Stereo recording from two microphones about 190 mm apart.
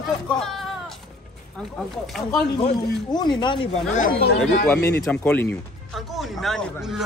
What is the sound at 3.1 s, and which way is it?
Speech, 25° left (ahead or behind).